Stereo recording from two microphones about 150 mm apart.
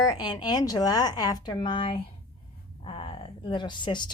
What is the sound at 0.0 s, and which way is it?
Speech, 25° left (ahead or behind).